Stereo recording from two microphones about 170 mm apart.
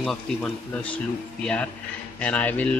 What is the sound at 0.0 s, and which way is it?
A man's voice, 5° left (ahead or behind).